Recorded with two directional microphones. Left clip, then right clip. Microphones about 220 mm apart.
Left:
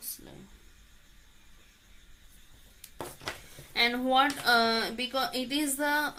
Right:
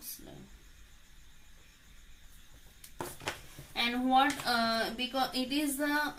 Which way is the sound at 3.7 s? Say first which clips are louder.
Left 3 dB; 45° left (ahead or behind).